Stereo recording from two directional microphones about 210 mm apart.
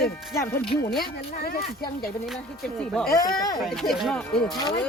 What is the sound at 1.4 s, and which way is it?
Speech, 45° left (ahead or behind).